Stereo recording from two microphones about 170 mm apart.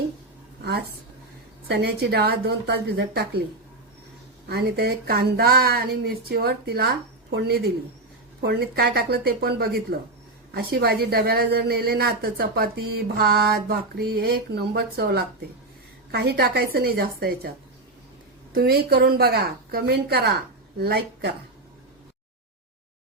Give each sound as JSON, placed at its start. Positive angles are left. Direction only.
{"t": 0.6, "sound": "a woman's voice", "side_deg": -70}
{"t": 4.4, "sound": "a woman's voice", "side_deg": -65}
{"t": 18.5, "sound": "a woman's voice", "side_deg": -65}